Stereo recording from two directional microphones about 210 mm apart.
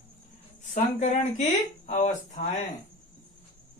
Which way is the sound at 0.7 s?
35° left (ahead or behind).